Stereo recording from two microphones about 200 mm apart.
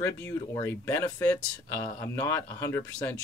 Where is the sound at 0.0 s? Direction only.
15° left (ahead or behind).